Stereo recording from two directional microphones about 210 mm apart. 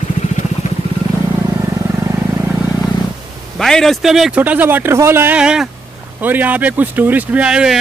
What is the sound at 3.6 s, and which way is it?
Speech, centre (ahead or behind).